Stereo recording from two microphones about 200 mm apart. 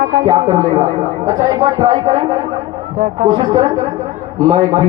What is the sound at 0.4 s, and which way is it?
Speech, 15° right (ahead or behind).